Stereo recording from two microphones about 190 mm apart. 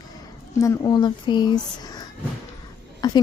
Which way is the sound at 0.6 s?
20° left (ahead or behind).